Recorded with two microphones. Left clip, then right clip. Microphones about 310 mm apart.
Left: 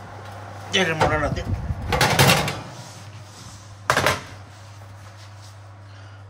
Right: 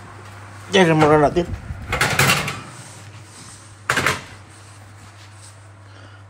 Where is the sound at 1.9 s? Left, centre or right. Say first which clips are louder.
Even; left.